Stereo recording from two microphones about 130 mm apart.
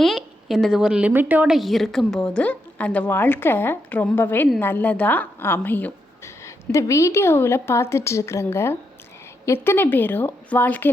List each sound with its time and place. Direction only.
0.0 s a woman's voice: centre (ahead or behind)
1.5 s a woman's voice: centre (ahead or behind)